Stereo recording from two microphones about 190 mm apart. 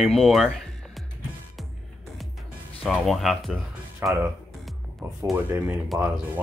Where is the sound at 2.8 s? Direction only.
Centre (ahead or behind).